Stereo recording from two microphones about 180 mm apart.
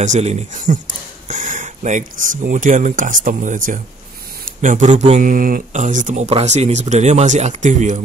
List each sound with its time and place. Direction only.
0.0 s speech: 40° right (ahead or behind)